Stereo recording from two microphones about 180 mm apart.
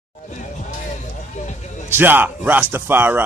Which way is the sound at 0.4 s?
45° left (ahead or behind).